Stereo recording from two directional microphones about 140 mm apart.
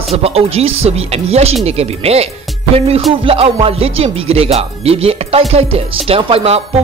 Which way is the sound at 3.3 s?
45° right (ahead or behind).